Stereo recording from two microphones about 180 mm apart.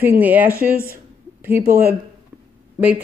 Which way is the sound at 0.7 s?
55° right (ahead or behind).